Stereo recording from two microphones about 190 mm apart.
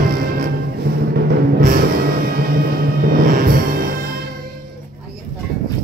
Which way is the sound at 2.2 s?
50° right (ahead or behind).